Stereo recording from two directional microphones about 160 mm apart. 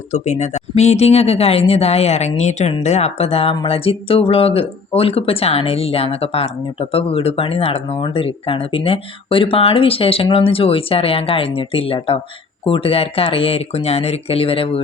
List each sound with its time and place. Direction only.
0.1 s speech: 45° left (ahead or behind)